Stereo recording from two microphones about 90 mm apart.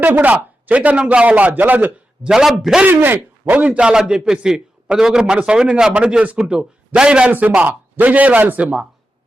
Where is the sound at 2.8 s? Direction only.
25° right (ahead or behind).